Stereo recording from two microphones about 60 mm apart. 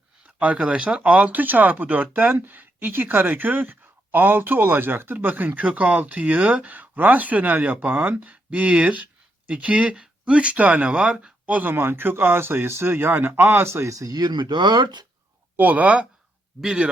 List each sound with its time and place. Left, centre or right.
0.3 s speech: right
11.7 s speech: right
13.7 s a man's voice: right
13.9 s speech: right
15.5 s speech: right
16.6 s speech: centre